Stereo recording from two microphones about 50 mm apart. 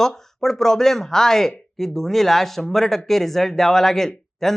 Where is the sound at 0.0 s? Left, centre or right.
Centre.